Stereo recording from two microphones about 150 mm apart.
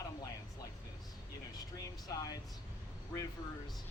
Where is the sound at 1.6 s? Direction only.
25° left (ahead or behind).